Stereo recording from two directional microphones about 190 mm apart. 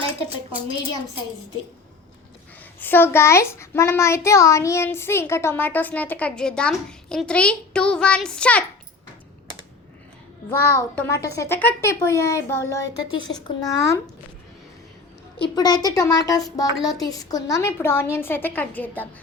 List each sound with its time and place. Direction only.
2.8 s a child's voice: 10° left (ahead or behind)
10.5 s a child's voice: 15° left (ahead or behind)
15.4 s a woman's voice: 20° left (ahead or behind)